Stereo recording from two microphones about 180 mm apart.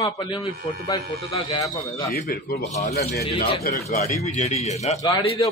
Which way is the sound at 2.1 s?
55° left (ahead or behind).